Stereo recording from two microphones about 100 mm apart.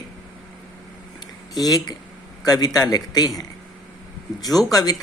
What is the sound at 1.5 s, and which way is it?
Speech, 40° left (ahead or behind).